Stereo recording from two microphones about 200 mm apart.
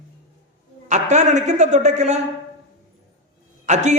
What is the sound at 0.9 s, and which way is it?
A man's voice, 35° right (ahead or behind).